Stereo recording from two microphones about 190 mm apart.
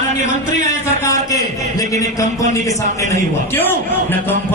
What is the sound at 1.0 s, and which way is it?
A man's voice, 15° left (ahead or behind).